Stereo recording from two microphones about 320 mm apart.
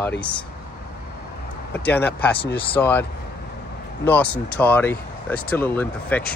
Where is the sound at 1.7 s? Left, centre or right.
Centre.